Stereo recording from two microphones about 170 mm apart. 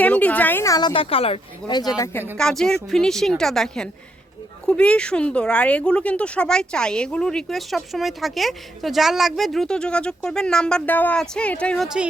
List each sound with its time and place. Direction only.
0.0 s a woman's voice: 10° left (ahead or behind); by 1.8 s 30° left (ahead or behind)
2.4 s speech: 5° left (ahead or behind)